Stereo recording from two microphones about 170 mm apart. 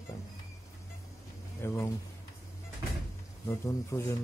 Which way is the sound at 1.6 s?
15° left (ahead or behind).